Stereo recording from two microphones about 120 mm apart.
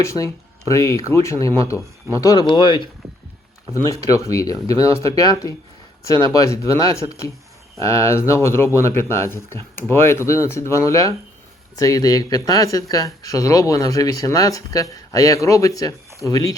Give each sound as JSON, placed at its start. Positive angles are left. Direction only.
{"t": 0.0, "sound": "speech", "side_deg": 25}
{"t": 3.8, "sound": "speech", "side_deg": 25}